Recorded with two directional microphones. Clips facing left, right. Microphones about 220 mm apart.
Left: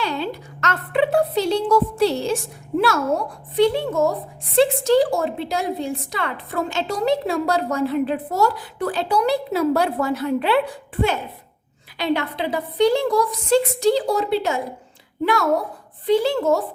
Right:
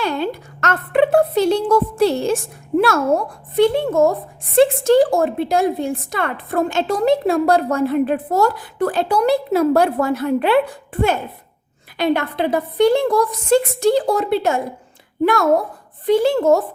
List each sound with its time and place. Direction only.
0.0 s a woman's voice: 50° right (ahead or behind)
11.9 s a woman's voice: 50° right (ahead or behind)